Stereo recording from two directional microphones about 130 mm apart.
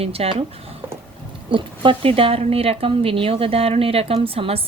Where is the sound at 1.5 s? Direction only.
40° right (ahead or behind).